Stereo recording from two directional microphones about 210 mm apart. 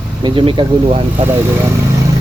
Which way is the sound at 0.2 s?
25° right (ahead or behind).